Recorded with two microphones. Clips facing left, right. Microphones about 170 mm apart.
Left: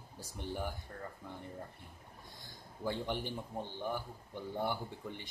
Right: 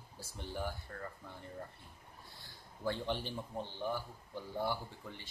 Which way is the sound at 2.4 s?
15° left (ahead or behind).